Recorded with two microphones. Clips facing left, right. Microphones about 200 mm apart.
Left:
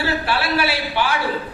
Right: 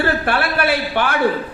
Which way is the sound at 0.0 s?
55° right (ahead or behind).